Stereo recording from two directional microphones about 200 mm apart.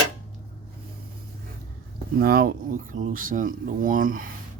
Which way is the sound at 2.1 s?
50° right (ahead or behind).